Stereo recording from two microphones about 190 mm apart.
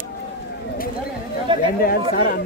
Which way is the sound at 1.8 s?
50° left (ahead or behind).